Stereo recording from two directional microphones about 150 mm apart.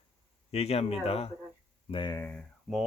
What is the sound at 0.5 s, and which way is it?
Speech, 45° left (ahead or behind).